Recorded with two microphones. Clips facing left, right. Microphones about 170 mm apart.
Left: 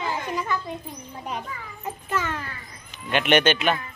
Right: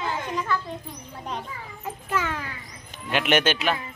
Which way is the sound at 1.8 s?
10° right (ahead or behind).